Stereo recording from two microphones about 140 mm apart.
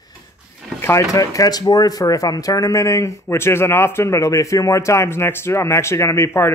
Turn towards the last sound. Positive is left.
turn(degrees=20)  # may be behind; listen again after turning